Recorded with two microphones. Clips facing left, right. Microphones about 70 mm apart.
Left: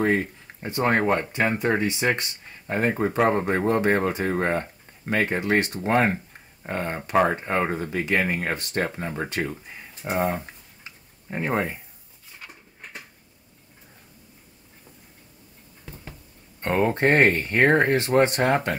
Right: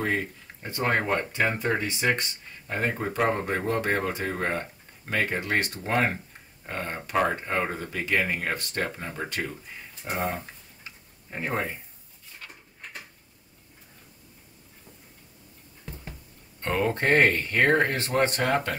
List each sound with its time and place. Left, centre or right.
0.0 s speech: left
1.0 s speech: centre
1.6 s speech: left
10.0 s speech: centre
11.2 s speech: left
15.8 s a sound: centre
16.6 s speech: left